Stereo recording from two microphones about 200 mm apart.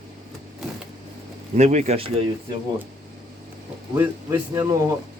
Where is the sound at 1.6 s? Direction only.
35° right (ahead or behind).